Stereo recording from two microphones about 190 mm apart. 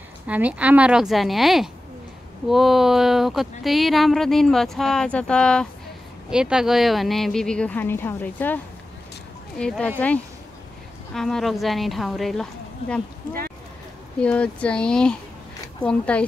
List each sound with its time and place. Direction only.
0.3 s speech: 5° right (ahead or behind); by 8.5 s 10° left (ahead or behind)
9.6 s speech: 5° left (ahead or behind)
14.2 s speech: 5° left (ahead or behind)